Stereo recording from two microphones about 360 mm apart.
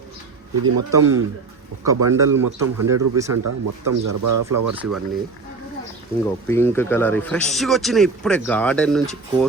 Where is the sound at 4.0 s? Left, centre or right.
Right.